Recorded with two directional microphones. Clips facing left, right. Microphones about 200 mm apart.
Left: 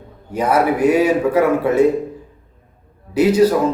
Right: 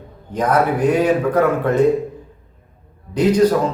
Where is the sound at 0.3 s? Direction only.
10° left (ahead or behind).